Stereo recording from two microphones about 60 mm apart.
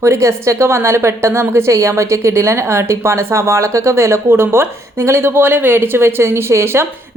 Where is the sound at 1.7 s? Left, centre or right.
Right.